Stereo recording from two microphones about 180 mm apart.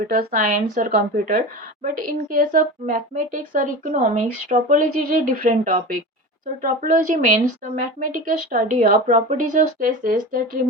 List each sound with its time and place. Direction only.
0.0 s a woman's voice: 50° right (ahead or behind)